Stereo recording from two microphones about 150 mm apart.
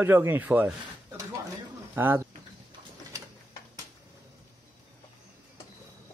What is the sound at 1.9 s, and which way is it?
Speech, 15° right (ahead or behind).